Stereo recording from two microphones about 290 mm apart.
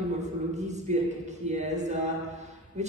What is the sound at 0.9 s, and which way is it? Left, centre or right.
Speech, right.